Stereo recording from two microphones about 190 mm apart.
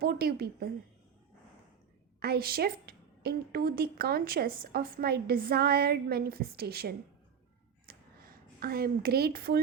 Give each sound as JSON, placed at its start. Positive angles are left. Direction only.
{"t": 0.0, "sound": "a woman's voice", "side_deg": -55}
{"t": 2.2, "sound": "a woman's voice", "side_deg": -55}
{"t": 7.9, "sound": "a sound", "side_deg": -50}